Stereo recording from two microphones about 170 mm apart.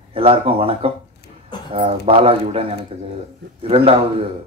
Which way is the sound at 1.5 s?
25° left (ahead or behind).